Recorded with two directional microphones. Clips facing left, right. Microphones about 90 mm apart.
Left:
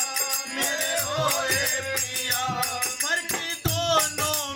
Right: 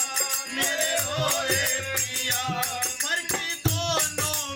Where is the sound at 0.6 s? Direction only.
25° left (ahead or behind).